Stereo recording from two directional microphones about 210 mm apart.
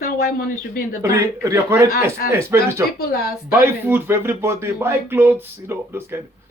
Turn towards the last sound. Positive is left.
turn(degrees=-10)  # may be behind; listen again after turning